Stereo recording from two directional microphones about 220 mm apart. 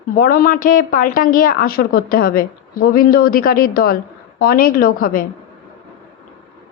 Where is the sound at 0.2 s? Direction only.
40° left (ahead or behind).